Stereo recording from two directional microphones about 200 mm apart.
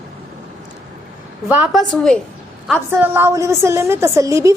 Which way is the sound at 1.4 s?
10° right (ahead or behind).